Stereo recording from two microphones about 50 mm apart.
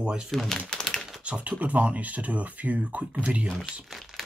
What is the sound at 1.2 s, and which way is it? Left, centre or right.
Speech, right.